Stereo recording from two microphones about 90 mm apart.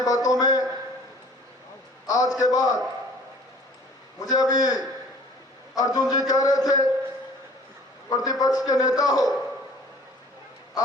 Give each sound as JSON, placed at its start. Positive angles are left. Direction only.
{"t": 0.0, "sound": "a sound", "side_deg": 40}
{"t": 2.0, "sound": "a man's voice", "side_deg": 45}
{"t": 4.2, "sound": "a man's voice", "side_deg": 45}
{"t": 8.1, "sound": "a man's voice", "side_deg": 40}